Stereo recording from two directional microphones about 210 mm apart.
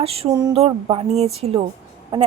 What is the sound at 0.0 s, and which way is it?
A woman's voice, 30° right (ahead or behind).